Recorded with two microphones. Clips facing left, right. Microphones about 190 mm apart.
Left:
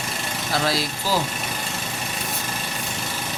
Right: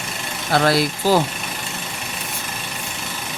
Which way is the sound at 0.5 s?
60° right (ahead or behind).